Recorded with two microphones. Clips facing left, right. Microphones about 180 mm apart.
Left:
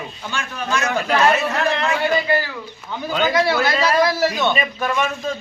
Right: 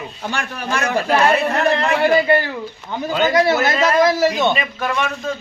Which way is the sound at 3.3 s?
45° right (ahead or behind).